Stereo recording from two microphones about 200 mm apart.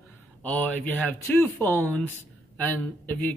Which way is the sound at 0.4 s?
5° left (ahead or behind).